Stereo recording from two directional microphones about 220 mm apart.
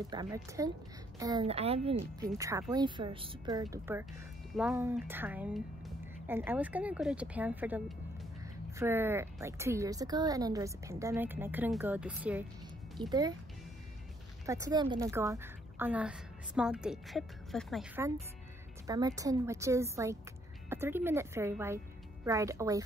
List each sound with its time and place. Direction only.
0.1 s a woman's voice: 15° right (ahead or behind)
13.0 s a woman's voice: 20° right (ahead or behind)
14.4 s a woman's voice: 15° right (ahead or behind); by 17.8 s centre (ahead or behind)
18.9 s a woman's voice: 15° right (ahead or behind)